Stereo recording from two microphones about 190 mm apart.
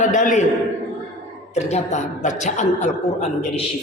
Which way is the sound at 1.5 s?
35° left (ahead or behind).